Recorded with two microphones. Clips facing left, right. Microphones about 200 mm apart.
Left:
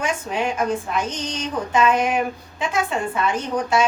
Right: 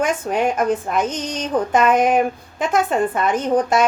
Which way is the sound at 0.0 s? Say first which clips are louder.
Right 5 dB; 50° right (ahead or behind).